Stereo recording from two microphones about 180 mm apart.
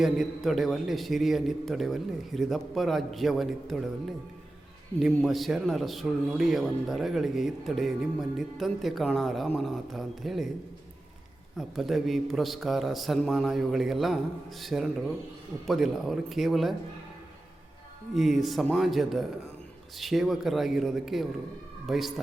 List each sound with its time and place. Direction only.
0.0 s a man's voice: centre (ahead or behind)
4.9 s a man's voice: centre (ahead or behind)
11.5 s a man's voice: centre (ahead or behind)
18.1 s a man's voice: centre (ahead or behind)